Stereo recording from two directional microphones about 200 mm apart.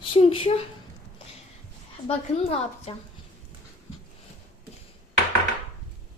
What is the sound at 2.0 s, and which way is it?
Speech, 30° left (ahead or behind).